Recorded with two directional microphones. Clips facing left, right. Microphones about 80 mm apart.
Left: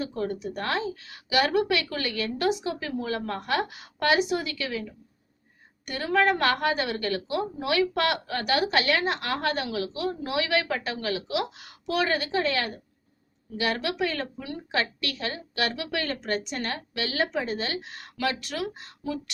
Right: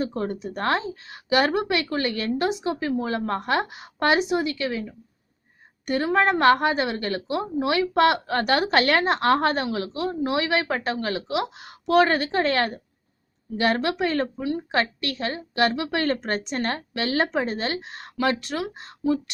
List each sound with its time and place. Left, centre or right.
0.0 s a woman's voice: right
8.3 s a woman's voice: right
11.9 s a woman's voice: right